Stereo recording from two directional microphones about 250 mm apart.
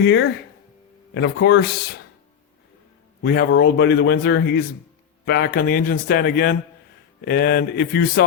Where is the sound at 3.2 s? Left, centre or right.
Left.